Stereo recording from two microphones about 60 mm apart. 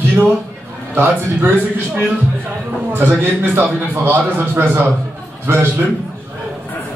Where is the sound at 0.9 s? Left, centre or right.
Right.